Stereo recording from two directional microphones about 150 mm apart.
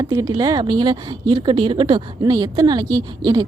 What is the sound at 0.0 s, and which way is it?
Speech, 25° right (ahead or behind).